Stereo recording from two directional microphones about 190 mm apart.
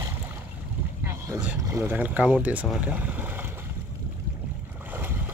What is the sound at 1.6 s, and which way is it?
Speech, 15° right (ahead or behind).